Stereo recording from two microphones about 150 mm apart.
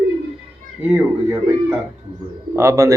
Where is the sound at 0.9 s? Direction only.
10° right (ahead or behind).